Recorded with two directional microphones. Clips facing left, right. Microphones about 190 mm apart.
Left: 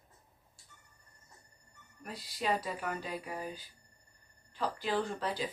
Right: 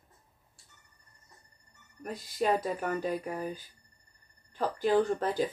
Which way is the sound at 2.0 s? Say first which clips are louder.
Right 5 dB; 50° right (ahead or behind).